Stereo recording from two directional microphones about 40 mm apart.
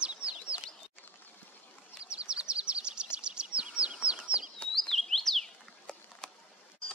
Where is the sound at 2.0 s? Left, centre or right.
Right.